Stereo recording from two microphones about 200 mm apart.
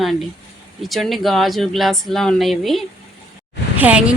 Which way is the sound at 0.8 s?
Centre (ahead or behind).